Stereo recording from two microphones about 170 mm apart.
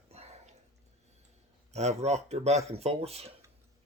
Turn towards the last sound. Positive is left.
turn(degrees=-35)  # may be behind; listen again after turning